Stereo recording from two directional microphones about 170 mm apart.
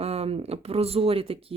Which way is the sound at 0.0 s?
35° right (ahead or behind).